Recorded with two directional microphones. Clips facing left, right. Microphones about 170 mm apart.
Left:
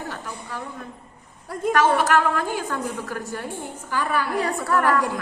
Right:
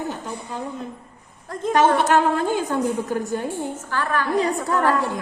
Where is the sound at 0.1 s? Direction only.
20° right (ahead or behind).